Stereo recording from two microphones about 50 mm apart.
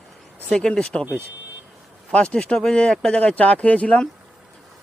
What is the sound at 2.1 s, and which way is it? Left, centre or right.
A man's voice, left.